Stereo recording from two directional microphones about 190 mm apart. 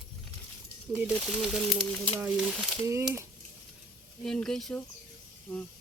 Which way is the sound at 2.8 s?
15° right (ahead or behind).